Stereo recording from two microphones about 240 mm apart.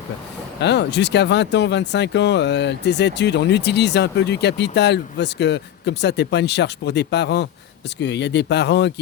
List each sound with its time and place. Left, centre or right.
0.6 s speech: left